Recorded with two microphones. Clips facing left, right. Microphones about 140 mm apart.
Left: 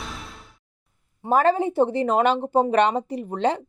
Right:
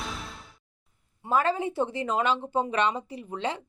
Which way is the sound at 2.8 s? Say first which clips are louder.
Left 6 dB; 65° left (ahead or behind).